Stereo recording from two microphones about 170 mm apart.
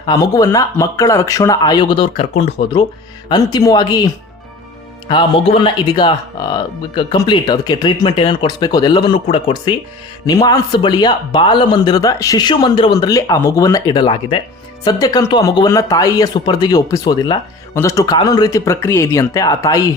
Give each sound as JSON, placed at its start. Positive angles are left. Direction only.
{"t": 0.0, "sound": "speech", "side_deg": 25}
{"t": 3.2, "sound": "speech", "side_deg": 25}